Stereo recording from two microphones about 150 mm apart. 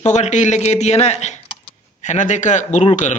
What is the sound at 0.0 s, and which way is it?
Speech, 50° left (ahead or behind).